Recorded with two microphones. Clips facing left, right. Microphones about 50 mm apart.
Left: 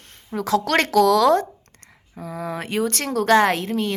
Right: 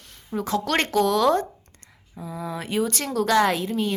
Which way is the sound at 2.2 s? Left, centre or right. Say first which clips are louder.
Left 3 dB; left.